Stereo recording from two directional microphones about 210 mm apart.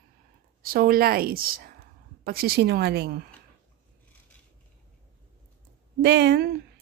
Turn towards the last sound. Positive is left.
turn(degrees=-50)  # may be behind; listen again after turning